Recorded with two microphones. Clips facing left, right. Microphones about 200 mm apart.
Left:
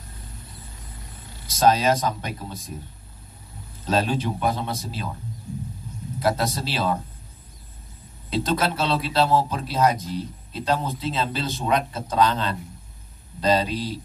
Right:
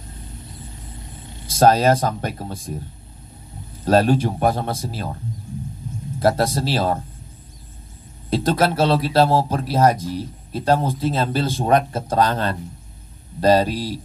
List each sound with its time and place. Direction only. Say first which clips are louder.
1.6 s speech: right 4 dB; 50° right (ahead or behind)
3.8 s speech: right 7 dB; 55° right (ahead or behind)
6.1 s speech: right 5 dB; 50° right (ahead or behind)
8.3 s speech: right 5 dB; 50° right (ahead or behind)